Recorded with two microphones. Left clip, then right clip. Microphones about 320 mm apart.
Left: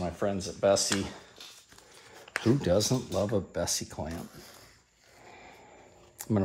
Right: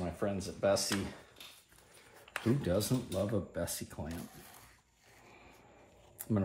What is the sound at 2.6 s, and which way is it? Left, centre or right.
Speech, left.